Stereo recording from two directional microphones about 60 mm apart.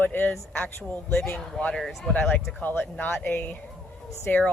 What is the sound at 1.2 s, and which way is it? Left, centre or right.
Speech, centre.